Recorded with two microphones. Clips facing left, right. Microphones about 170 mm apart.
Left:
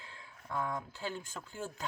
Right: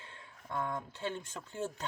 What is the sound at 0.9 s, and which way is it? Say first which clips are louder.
Speech: right 2 dB; 25° right (ahead or behind).